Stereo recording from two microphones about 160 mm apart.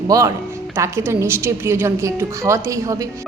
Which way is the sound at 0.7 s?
15° right (ahead or behind).